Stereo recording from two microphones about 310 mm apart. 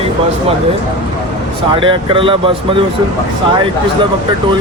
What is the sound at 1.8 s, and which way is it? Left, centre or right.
Speech, centre.